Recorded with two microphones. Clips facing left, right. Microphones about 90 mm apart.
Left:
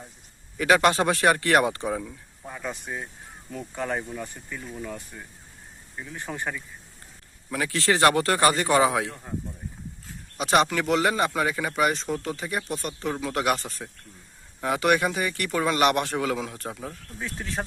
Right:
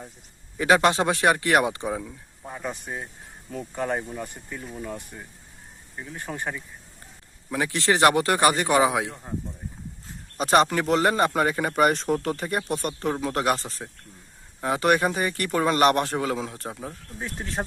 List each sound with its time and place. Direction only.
0.6 s speech: 25° right (ahead or behind)
1.9 s speech: 5° right (ahead or behind)
2.5 s speech: 15° right (ahead or behind)
6.3 s speech: centre (ahead or behind)
7.5 s speech: 25° right (ahead or behind)
10.3 s speech: 40° right (ahead or behind)
13.1 s speech: 35° right (ahead or behind)
17.2 s speech: 40° right (ahead or behind)